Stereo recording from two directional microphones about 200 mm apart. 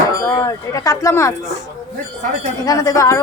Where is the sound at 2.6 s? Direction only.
20° left (ahead or behind).